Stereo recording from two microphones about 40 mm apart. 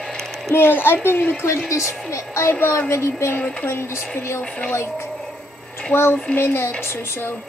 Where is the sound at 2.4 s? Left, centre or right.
Left.